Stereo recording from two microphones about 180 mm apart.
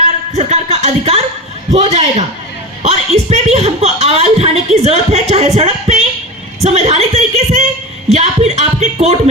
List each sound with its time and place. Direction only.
0.0 s a woman's voice: 40° right (ahead or behind)